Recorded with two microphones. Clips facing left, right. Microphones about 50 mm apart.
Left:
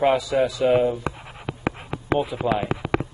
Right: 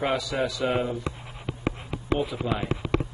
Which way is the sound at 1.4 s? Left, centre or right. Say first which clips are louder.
Left 3 dB; left.